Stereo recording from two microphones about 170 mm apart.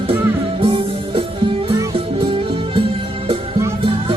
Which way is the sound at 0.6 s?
35° right (ahead or behind).